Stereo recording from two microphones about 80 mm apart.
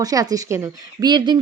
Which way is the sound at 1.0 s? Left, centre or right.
Right.